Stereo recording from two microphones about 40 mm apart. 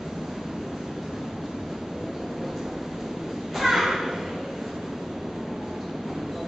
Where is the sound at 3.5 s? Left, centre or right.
Centre.